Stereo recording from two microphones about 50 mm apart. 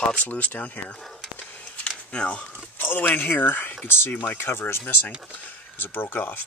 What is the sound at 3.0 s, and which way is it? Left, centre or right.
Speech, left.